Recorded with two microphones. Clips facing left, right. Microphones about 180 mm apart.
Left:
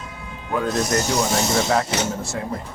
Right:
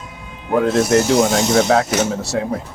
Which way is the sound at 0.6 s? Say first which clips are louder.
Right 7 dB; 80° right.